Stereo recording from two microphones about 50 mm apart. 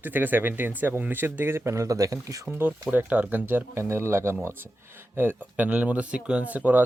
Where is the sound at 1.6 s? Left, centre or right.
Right.